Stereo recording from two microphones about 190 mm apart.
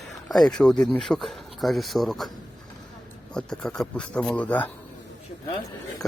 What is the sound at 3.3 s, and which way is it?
Speech, 5° left (ahead or behind).